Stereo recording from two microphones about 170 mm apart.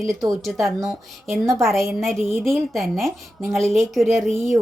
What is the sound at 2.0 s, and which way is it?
A woman's voice, centre (ahead or behind).